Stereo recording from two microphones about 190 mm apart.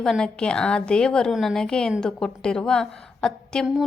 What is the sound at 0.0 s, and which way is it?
A woman's voice, 5° left (ahead or behind).